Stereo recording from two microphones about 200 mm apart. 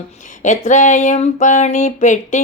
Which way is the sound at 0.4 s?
40° left (ahead or behind).